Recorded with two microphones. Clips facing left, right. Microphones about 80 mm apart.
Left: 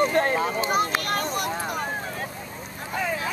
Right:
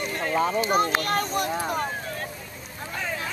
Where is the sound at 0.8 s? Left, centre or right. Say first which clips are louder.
Right 1 dB; right.